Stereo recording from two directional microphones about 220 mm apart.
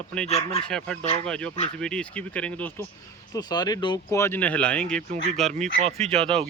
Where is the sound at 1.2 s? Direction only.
5° left (ahead or behind).